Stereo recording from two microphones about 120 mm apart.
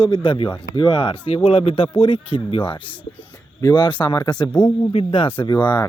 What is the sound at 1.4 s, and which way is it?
A man's voice, 55° left (ahead or behind).